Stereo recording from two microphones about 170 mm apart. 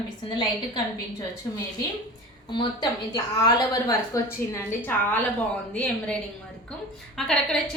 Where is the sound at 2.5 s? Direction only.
25° left (ahead or behind); by 6.1 s 10° left (ahead or behind).